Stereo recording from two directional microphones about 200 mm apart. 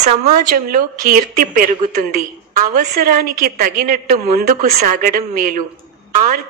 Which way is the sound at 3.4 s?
50° right (ahead or behind).